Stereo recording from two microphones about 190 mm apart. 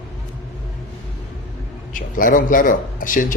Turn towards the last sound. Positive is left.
turn(degrees=45)  # may be behind; listen again after turning